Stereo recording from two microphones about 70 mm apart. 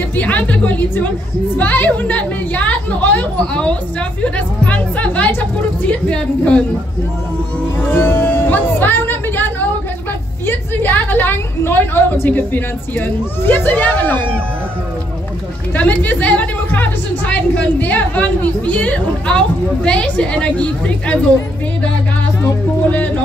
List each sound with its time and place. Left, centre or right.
0.1 s music: left
1.6 s a woman's voice: left
7.9 s a sound: left
10.4 s a woman's voice: left
15.7 s a woman's voice: left
22.4 s music: left